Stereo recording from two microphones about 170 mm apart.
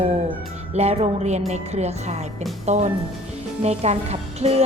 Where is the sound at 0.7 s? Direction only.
40° right (ahead or behind).